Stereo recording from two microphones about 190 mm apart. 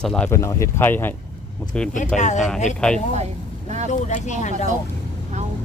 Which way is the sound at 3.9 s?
40° left (ahead or behind).